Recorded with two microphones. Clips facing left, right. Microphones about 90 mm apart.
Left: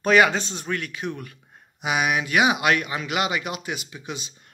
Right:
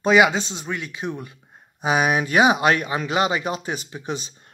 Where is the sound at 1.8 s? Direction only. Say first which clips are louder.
Right 4 dB; 35° right (ahead or behind).